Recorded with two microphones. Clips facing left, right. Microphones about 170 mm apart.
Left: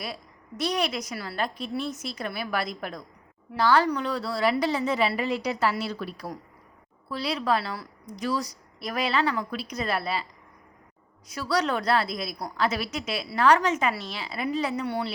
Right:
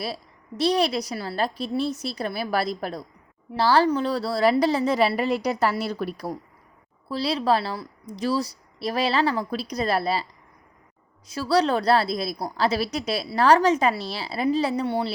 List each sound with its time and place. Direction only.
0.0 s a woman's voice: 30° right (ahead or behind)
7.1 s a woman's voice: 30° right (ahead or behind)
11.3 s a woman's voice: 30° right (ahead or behind)